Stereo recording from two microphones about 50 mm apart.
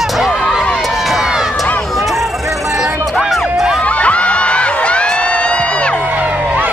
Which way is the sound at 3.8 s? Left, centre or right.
Left.